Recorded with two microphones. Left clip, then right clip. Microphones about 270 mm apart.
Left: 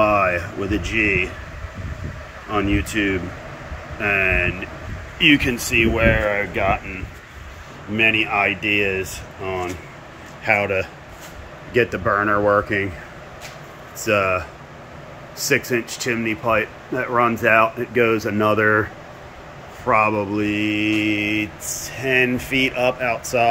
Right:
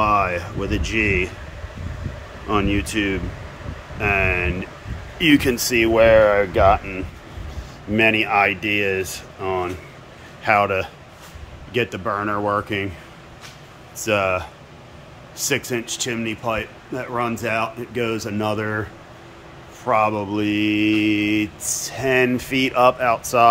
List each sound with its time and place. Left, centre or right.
0.1 s speech: centre
2.5 s speech: centre
7.9 s speech: centre
11.7 s speech: centre
13.9 s speech: centre
15.4 s speech: centre
19.9 s speech: centre
20.3 s speech: centre